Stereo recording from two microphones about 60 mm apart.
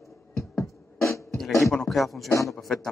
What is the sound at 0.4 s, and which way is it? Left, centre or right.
Music, left.